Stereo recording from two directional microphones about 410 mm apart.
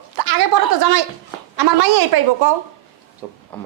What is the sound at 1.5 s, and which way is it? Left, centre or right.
Speech, right.